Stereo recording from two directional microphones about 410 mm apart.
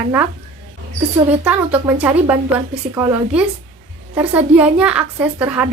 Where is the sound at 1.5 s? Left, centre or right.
Centre.